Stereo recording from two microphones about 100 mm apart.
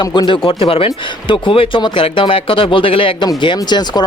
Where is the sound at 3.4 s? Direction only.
50° left (ahead or behind).